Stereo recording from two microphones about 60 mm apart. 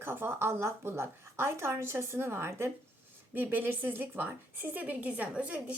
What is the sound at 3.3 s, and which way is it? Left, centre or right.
A woman's voice, right.